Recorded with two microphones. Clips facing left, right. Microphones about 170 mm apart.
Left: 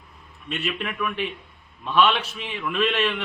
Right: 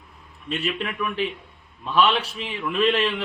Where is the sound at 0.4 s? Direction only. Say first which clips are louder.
Right 2 dB; 35° right (ahead or behind).